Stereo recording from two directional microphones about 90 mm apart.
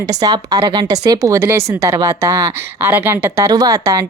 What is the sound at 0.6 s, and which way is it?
A woman's voice, 55° right (ahead or behind).